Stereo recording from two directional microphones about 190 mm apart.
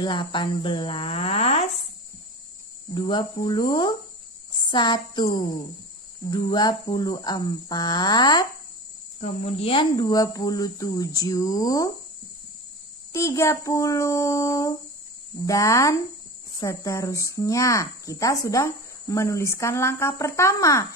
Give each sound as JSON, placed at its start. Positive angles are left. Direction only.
{"t": 0.0, "sound": "speech", "side_deg": 25}
{"t": 2.9, "sound": "speech", "side_deg": 25}
{"t": 9.2, "sound": "speech", "side_deg": 35}
{"t": 13.1, "sound": "speech", "side_deg": 15}